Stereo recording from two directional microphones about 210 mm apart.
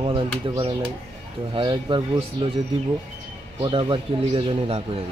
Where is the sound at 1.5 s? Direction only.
20° right (ahead or behind).